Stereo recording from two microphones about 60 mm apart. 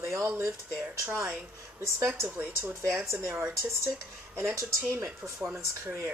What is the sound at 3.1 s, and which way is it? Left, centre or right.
Speech, right.